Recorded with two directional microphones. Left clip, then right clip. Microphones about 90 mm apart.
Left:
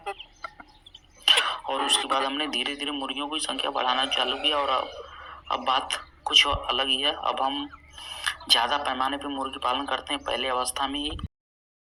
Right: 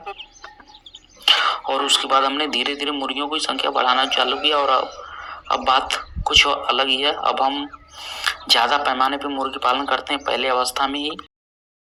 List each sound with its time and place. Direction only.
1.2 s speech: 40° right (ahead or behind)